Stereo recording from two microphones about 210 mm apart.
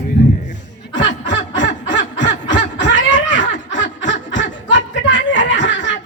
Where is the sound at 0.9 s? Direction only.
60° left (ahead or behind).